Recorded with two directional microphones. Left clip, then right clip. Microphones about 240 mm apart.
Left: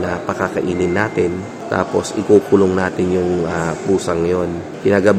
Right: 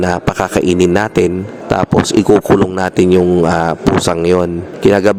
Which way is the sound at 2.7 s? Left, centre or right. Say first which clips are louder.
Right 6 dB; right.